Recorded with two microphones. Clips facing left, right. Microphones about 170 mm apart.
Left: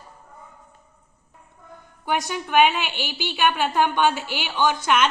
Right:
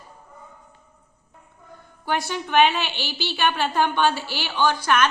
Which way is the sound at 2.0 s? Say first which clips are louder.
Even; 15° left (ahead or behind).